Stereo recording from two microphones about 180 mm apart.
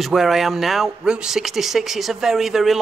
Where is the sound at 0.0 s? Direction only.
Centre (ahead or behind).